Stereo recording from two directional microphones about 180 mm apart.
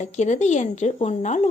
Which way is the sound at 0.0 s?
40° left (ahead or behind).